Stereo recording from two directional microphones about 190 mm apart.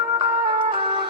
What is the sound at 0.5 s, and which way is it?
Music, 25° right (ahead or behind).